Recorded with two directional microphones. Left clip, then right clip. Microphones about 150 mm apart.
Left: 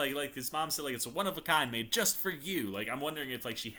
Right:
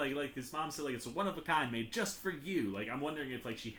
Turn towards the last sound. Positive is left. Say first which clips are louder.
# left 3 dB
turn(degrees=15)  # may be behind; listen again after turning